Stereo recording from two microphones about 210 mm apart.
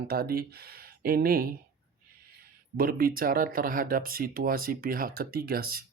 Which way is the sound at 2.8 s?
45° right (ahead or behind).